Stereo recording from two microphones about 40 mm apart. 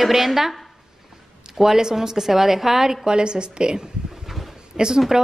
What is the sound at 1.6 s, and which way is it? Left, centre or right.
A woman's voice, centre.